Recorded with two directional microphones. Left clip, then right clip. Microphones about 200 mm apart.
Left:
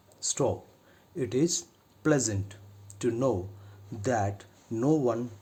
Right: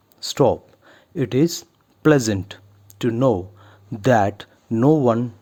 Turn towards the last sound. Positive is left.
turn(degrees=-35)  # may be behind; listen again after turning